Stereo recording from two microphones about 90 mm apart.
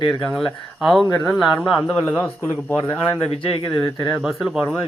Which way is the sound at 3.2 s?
90° left.